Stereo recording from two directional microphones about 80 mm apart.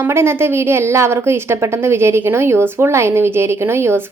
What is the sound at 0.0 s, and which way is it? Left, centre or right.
A woman's voice, right.